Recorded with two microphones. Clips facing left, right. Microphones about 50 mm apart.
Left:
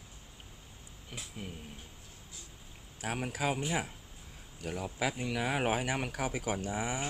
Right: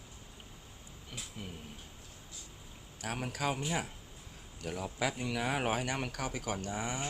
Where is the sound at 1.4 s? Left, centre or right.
Centre.